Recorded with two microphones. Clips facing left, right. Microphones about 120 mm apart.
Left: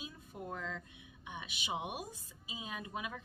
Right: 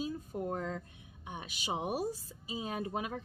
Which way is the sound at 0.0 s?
40° right (ahead or behind).